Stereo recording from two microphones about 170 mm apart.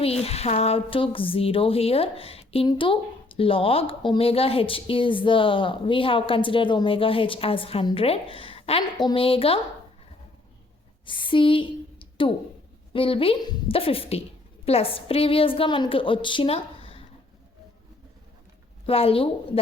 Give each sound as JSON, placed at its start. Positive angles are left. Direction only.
{"t": 0.0, "sound": "speech", "side_deg": 35}
{"t": 11.0, "sound": "a sound", "side_deg": 30}
{"t": 12.9, "sound": "speech", "side_deg": 30}
{"t": 18.9, "sound": "speech", "side_deg": 35}